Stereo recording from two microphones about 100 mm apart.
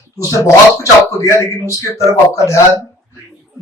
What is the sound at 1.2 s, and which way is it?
Speech, 30° left (ahead or behind).